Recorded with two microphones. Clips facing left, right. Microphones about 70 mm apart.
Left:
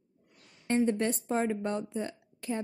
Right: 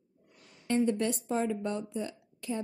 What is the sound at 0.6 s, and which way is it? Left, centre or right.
A woman's voice, left.